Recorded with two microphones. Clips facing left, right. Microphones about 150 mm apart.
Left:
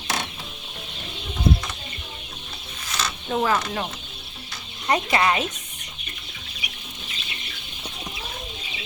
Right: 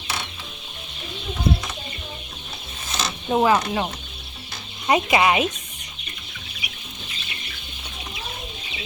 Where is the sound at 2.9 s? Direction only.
20° right (ahead or behind).